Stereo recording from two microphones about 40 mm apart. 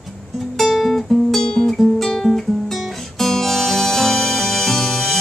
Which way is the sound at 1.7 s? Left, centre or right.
Centre.